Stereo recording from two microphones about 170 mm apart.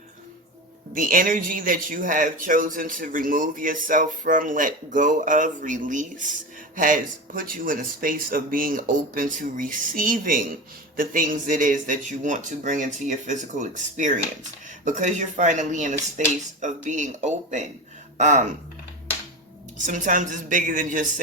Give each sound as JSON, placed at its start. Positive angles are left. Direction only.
{"t": 0.9, "sound": "speech", "side_deg": -55}
{"t": 19.8, "sound": "speech", "side_deg": -50}